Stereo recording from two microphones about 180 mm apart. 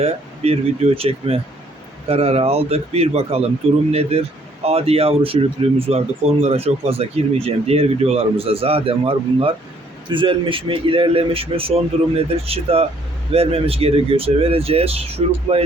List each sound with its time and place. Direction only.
0.0 s speech: 35° right (ahead or behind)